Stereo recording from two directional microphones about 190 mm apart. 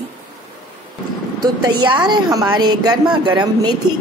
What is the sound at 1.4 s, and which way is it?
A woman's voice, 20° right (ahead or behind).